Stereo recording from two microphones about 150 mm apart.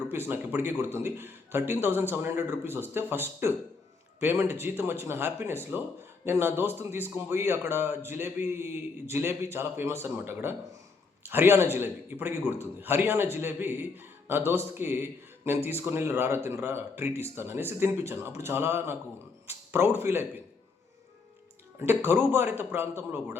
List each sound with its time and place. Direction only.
0.1 s a man's voice: 15° right (ahead or behind)
21.8 s a man's voice: 15° right (ahead or behind)